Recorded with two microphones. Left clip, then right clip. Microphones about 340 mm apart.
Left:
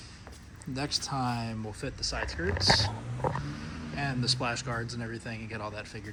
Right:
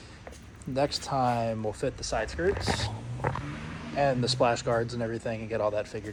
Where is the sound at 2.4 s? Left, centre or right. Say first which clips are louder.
Right 7 dB; right.